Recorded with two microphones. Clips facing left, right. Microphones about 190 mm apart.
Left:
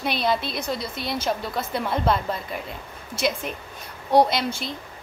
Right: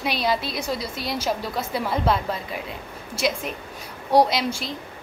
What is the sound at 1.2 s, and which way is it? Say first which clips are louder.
A woman's voice: right 1 dB; 5° right (ahead or behind).